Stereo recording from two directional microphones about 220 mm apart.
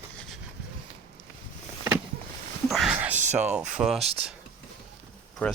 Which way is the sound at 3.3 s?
5° right (ahead or behind).